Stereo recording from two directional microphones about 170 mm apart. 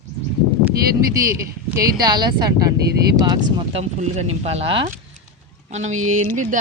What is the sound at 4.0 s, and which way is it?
Speech, 40° right (ahead or behind).